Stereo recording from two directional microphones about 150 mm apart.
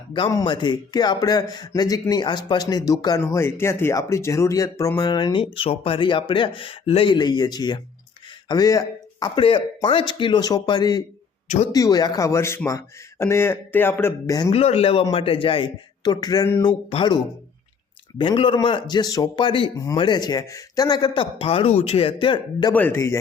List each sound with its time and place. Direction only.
0.3 s speech: 25° left (ahead or behind)
11.4 s speech: 55° left (ahead or behind)
11.7 s a man's voice: 25° left (ahead or behind)
14.5 s speech: 40° left (ahead or behind); by 16.7 s 25° left (ahead or behind)
16.9 s speech: 35° left (ahead or behind)
18.2 s speech: 35° left (ahead or behind)
19.7 s speech: 25° left (ahead or behind)
22.7 s a man's voice: 15° left (ahead or behind)